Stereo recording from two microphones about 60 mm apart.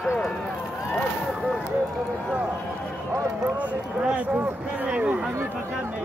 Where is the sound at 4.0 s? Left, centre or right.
Right.